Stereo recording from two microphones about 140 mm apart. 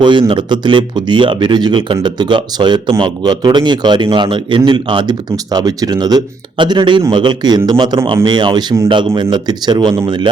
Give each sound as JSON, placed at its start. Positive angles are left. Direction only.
{"t": 0.0, "sound": "speech", "side_deg": -35}